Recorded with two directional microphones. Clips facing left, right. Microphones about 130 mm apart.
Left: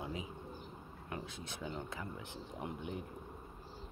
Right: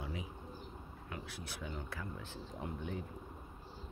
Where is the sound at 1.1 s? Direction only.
20° left (ahead or behind).